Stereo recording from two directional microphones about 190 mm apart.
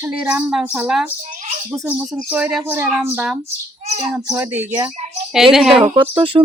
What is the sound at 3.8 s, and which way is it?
Bird, 35° right (ahead or behind).